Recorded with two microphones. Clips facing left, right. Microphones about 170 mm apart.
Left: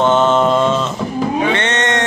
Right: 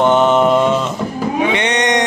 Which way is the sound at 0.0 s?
15° right (ahead or behind).